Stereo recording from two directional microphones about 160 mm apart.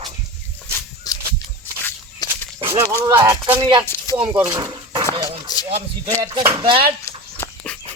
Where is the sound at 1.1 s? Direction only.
25° left (ahead or behind).